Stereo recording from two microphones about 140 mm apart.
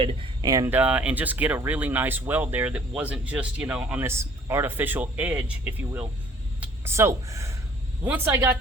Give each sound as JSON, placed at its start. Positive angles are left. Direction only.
{"t": 0.0, "sound": "speech", "side_deg": -30}
{"t": 0.7, "sound": "speech", "side_deg": -10}